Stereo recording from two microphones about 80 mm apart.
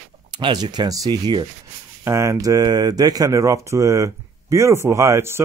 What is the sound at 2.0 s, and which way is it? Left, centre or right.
Speech, right.